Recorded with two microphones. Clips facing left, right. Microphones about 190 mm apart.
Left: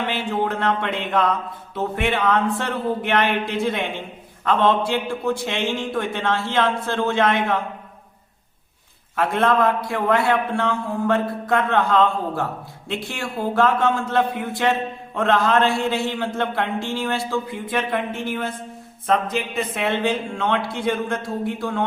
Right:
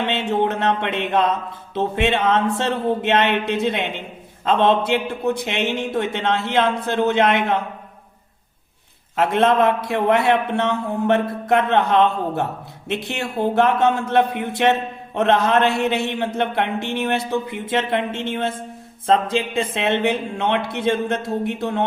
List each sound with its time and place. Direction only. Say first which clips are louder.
0.0 s speech: right 3 dB; 25° right (ahead or behind)
9.1 s speech: right 2 dB; 25° right (ahead or behind)